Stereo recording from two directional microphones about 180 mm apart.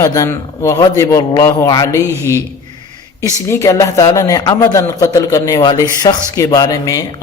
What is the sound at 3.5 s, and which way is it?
A man's voice, 15° left (ahead or behind).